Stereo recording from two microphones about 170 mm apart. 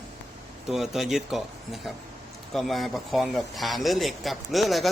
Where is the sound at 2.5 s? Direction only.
Centre (ahead or behind).